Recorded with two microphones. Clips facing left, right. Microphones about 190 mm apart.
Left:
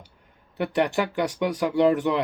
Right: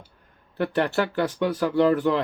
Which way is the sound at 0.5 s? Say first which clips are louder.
Even; 15° left (ahead or behind).